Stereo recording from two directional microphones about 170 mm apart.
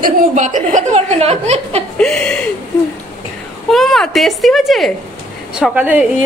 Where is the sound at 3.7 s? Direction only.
Centre (ahead or behind).